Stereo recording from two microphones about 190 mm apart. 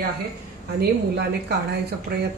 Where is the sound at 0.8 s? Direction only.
55° right (ahead or behind).